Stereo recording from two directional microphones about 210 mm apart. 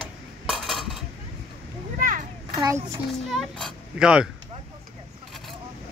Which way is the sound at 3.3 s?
Centre (ahead or behind).